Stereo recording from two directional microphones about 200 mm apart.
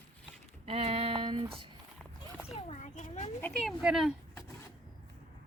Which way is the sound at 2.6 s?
35° left (ahead or behind).